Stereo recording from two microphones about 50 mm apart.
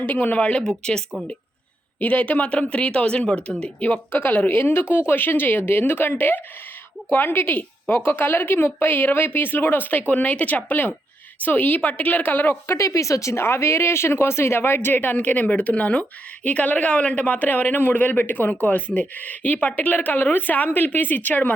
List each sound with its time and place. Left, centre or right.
0.1 s speech: left
0.6 s speech: centre
2.0 s a woman's voice: left
12.6 s speech: left